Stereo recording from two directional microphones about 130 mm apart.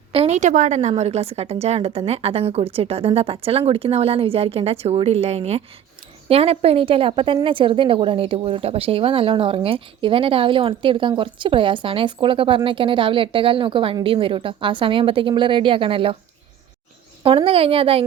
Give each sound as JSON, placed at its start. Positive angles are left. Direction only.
{"t": 0.1, "sound": "a sound", "side_deg": -50}
{"t": 0.3, "sound": "a woman's voice", "side_deg": -70}
{"t": 17.2, "sound": "a woman's voice", "side_deg": -45}